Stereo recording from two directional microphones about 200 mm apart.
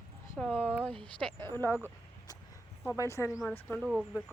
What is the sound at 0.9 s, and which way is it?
Speech, 25° right (ahead or behind).